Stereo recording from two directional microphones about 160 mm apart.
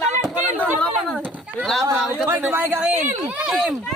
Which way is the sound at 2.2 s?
15° right (ahead or behind).